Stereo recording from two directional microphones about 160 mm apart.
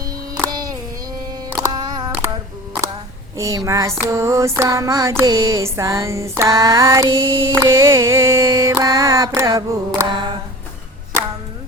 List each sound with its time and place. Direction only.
0.3 s music: 20° right (ahead or behind)
1.5 s child singing: 25° right (ahead or behind)
3.3 s a sound: 20° right (ahead or behind)